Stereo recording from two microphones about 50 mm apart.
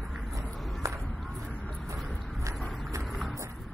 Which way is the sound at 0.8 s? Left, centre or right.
Right.